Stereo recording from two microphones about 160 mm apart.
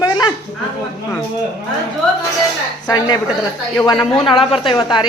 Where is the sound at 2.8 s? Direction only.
25° left (ahead or behind).